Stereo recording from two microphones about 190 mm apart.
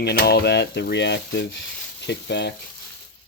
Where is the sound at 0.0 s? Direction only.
55° left (ahead or behind).